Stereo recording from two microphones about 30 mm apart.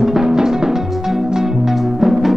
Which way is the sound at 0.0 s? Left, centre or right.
Right.